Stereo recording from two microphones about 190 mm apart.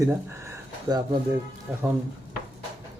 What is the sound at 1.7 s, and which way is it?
Speech, 5° right (ahead or behind).